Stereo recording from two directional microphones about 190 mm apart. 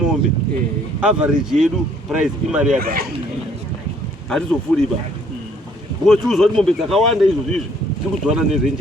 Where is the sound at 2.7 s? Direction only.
50° right (ahead or behind).